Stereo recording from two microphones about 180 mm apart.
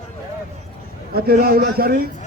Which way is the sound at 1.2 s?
55° right (ahead or behind).